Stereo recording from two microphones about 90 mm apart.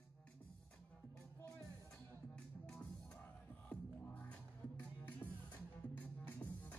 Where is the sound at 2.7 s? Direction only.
15° left (ahead or behind).